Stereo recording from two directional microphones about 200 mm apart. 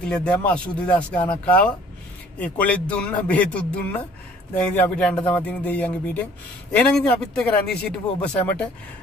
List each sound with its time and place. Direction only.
0.0 s speech: 5° left (ahead or behind)